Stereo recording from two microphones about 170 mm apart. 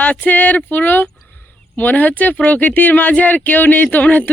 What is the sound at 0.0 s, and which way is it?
Speech, 10° left (ahead or behind).